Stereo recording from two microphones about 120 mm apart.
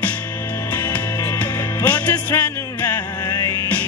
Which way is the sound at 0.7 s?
20° left (ahead or behind).